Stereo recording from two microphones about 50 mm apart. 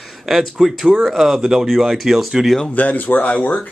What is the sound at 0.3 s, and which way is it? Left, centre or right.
A man's voice, centre.